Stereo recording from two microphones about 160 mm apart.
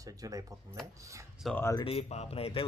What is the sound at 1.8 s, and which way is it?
Speech, 40° left (ahead or behind).